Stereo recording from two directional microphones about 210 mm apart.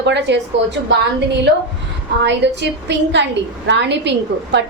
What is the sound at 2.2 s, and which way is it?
A woman's voice, 55° right (ahead or behind).